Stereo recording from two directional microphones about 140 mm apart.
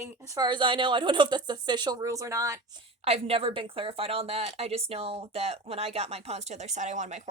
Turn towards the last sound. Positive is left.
turn(degrees=-55)  # may be behind; listen again after turning